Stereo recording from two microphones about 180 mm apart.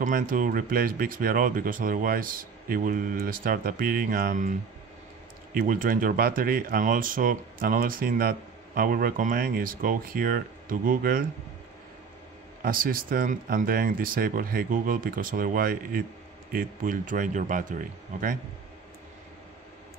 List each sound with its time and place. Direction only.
0.0 s speech: 50° right (ahead or behind)
12.6 s speech: 50° right (ahead or behind)